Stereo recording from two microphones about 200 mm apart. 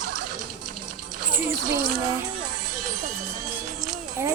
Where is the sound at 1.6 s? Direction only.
45° right (ahead or behind).